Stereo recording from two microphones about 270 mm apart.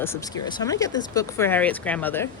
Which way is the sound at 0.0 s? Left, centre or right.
Centre.